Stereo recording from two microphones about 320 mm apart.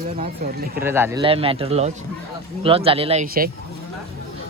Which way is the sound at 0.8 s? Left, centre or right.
Centre.